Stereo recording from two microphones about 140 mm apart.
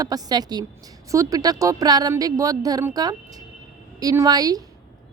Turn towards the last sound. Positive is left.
turn(degrees=-25)  # may be behind; listen again after turning